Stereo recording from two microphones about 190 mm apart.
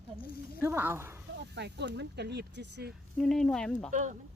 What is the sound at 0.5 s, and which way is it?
Speech, 15° right (ahead or behind).